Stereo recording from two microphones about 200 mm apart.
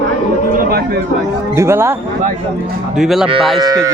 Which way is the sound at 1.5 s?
15° right (ahead or behind).